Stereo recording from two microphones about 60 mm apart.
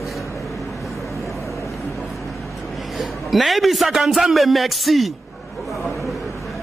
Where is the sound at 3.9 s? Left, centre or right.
Centre.